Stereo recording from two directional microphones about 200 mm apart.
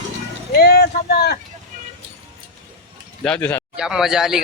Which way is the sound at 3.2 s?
5° left (ahead or behind).